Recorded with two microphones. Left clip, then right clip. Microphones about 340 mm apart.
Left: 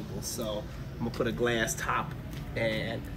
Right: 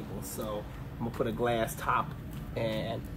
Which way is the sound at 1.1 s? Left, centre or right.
Centre.